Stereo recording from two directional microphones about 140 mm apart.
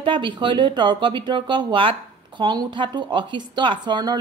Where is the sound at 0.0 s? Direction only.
35° right (ahead or behind).